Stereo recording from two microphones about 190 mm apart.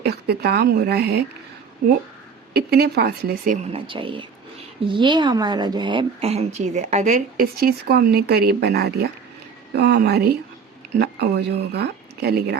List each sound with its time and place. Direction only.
0.0 s speech: 60° right (ahead or behind)
2.5 s speech: 55° right (ahead or behind)
3.7 s a woman's voice: 25° right (ahead or behind); by 12.5 s 55° right (ahead or behind)